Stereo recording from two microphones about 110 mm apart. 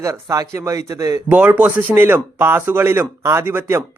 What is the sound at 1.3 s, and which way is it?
Speech, 15° right (ahead or behind).